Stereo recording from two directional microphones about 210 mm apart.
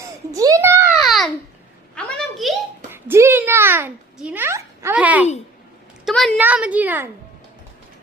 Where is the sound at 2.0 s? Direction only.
Centre (ahead or behind).